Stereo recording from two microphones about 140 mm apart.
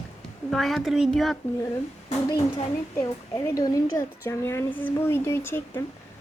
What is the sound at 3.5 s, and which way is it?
Speech, 25° left (ahead or behind).